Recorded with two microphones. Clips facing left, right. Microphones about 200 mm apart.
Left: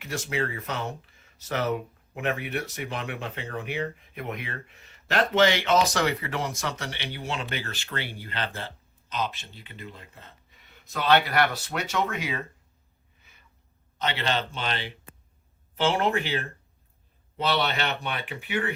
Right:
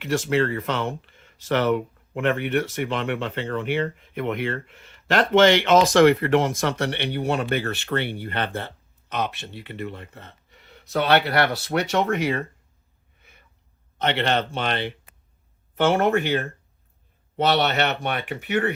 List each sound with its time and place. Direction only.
0.0 s speech: 65° right (ahead or behind); by 5.9 s 85° right
5.9 s speech: 55° right (ahead or behind)
14.0 s speech: 60° right (ahead or behind)